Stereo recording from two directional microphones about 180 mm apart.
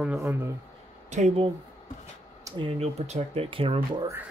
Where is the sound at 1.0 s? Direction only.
40° right (ahead or behind).